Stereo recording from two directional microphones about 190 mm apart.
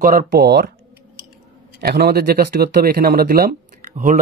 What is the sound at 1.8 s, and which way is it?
Speech, 55° right (ahead or behind).